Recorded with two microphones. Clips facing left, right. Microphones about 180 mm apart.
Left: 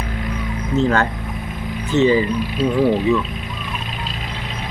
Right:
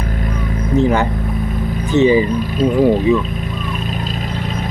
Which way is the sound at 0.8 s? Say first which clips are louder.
Right 3 dB; 15° right (ahead or behind).